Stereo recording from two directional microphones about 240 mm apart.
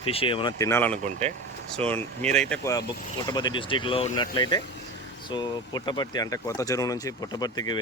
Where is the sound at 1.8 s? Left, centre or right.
Right.